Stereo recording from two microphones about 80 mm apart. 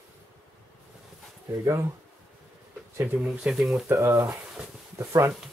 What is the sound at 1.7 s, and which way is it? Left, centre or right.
Speech, right.